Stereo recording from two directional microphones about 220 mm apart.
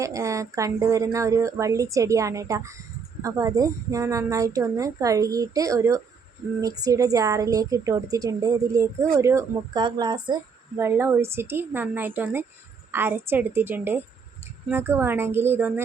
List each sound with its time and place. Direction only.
0.0 s speech: 15° right (ahead or behind)